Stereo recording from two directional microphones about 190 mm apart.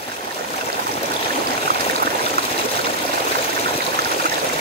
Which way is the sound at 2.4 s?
55° right (ahead or behind).